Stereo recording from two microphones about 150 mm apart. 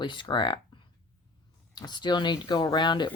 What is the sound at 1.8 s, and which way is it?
Speech, 30° left (ahead or behind).